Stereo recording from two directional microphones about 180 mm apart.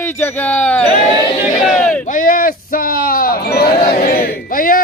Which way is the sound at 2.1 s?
50° left (ahead or behind).